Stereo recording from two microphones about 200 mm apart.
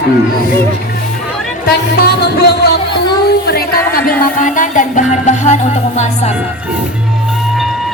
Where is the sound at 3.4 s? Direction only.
50° left (ahead or behind).